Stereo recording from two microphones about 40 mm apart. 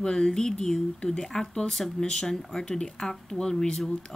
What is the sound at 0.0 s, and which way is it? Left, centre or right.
Speech, centre.